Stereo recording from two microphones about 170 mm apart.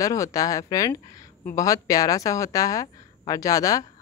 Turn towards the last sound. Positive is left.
turn(degrees=20)  # may be behind; listen again after turning